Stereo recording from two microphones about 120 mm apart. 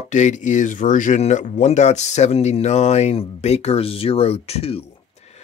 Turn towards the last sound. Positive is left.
turn(degrees=55)  # may be behind; listen again after turning